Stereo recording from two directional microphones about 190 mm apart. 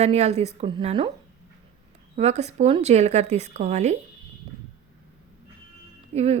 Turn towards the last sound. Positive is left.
turn(degrees=-35)  # may be behind; listen again after turning